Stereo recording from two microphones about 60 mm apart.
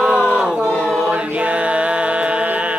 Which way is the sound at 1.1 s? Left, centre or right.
Right.